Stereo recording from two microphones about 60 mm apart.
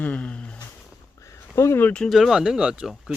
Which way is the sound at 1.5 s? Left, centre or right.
Left.